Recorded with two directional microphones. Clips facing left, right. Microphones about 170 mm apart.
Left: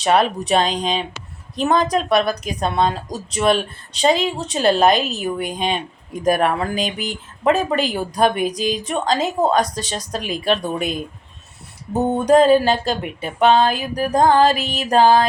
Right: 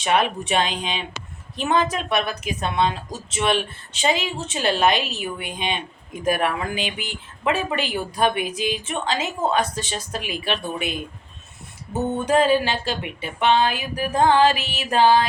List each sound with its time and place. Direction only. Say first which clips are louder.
0.0 s speech: left 4 dB; 35° left (ahead or behind)